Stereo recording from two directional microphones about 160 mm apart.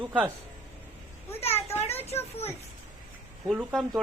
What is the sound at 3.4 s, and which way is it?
Speech, centre (ahead or behind).